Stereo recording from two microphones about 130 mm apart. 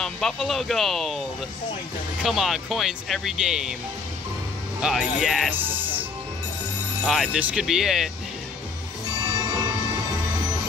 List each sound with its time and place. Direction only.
0.0 s speech: centre (ahead or behind)
2.2 s speech: centre (ahead or behind)
4.8 s speech: 5° right (ahead or behind)
7.3 s speech: 10° right (ahead or behind)
9.2 s music: 30° right (ahead or behind)